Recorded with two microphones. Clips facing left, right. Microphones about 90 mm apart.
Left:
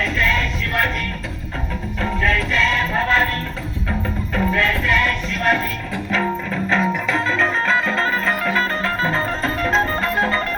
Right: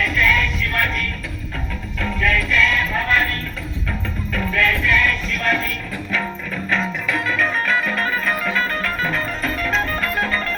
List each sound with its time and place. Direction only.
0.0 s music: 25° left (ahead or behind)
2.0 s music: 25° left (ahead or behind)
4.4 s music: 25° left (ahead or behind)
6.7 s music: 20° left (ahead or behind)